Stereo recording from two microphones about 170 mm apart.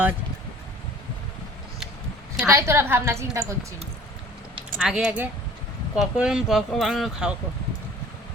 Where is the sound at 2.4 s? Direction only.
15° right (ahead or behind).